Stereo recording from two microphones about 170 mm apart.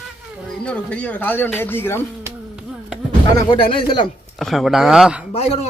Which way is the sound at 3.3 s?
30° left (ahead or behind).